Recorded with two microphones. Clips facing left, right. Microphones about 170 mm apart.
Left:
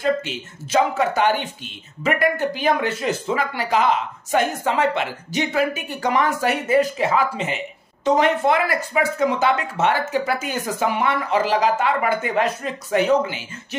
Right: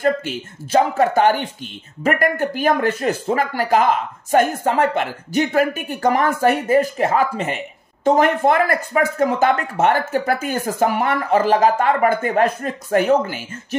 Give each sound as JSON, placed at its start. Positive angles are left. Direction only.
{"t": 0.0, "sound": "a woman's voice", "side_deg": -50}